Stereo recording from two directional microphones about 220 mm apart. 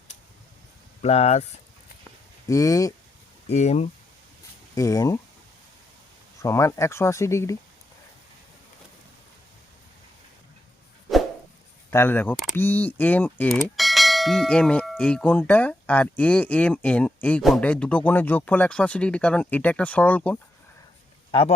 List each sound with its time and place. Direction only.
1.0 s speech: 30° left (ahead or behind)
2.5 s speech: 15° left (ahead or behind)
3.5 s speech: 30° left (ahead or behind)
4.7 s speech: 15° left (ahead or behind)
6.4 s speech: 15° left (ahead or behind)
11.9 s speech: 10° left (ahead or behind)